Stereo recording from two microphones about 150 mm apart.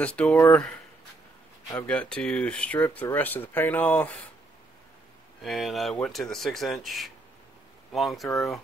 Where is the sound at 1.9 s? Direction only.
10° left (ahead or behind).